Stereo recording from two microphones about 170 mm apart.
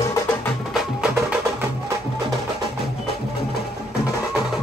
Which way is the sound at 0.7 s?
5° right (ahead or behind).